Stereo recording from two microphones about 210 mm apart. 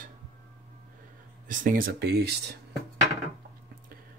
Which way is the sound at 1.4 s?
40° right (ahead or behind).